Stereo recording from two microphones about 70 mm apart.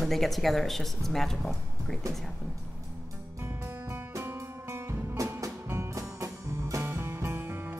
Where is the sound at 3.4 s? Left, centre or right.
Right.